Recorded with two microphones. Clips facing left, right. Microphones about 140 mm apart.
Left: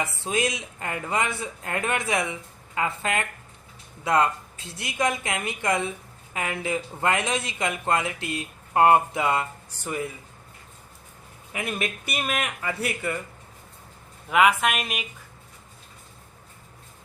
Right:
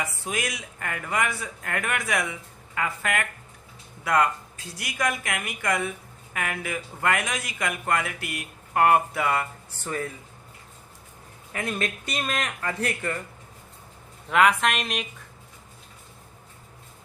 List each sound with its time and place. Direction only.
0.0 s speech: 25° left (ahead or behind)
11.5 s a man's voice: 10° left (ahead or behind)
14.3 s a woman's voice: 5° left (ahead or behind)